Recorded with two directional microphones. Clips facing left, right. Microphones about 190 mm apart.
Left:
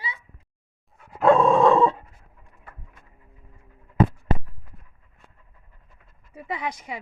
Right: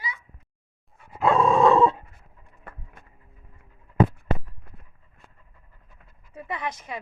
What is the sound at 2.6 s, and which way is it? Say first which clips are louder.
Clip-clop: right 3 dB; 55° right (ahead or behind).